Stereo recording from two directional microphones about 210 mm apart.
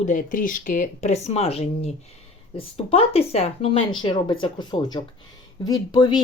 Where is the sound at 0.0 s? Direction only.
40° left (ahead or behind).